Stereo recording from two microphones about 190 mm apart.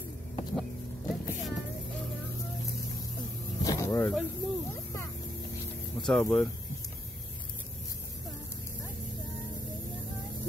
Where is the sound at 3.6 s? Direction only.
15° left (ahead or behind).